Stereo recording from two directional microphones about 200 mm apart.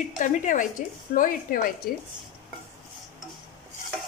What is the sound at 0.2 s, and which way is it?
A woman's voice, 40° left (ahead or behind).